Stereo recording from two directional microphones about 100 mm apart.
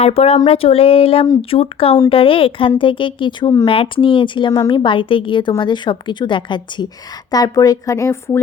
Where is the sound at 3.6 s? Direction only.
65° left (ahead or behind).